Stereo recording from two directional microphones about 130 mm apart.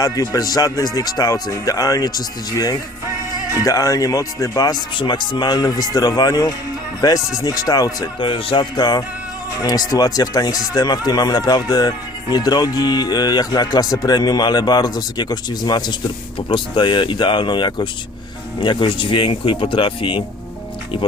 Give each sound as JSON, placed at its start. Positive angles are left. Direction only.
{"t": 0.0, "sound": "speech", "side_deg": 30}
{"t": 8.2, "sound": "speech", "side_deg": 40}